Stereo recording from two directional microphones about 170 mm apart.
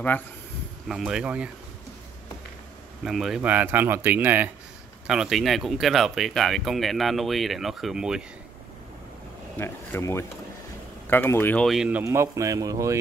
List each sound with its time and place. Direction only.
0.8 s speech: centre (ahead or behind)
3.0 s speech: centre (ahead or behind)
9.6 s speech: 15° left (ahead or behind)
11.6 s speech: centre (ahead or behind)
12.0 s speech: 15° right (ahead or behind)